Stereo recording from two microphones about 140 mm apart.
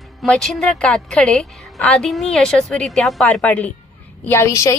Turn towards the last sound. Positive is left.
turn(degrees=20)  # may be behind; listen again after turning